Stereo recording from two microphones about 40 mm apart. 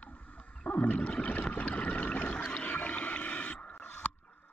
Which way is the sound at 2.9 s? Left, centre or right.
Left.